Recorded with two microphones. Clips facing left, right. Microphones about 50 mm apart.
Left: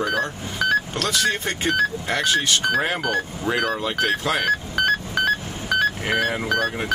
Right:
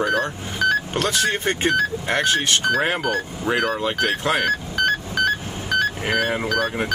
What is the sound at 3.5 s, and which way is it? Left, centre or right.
Speech, centre.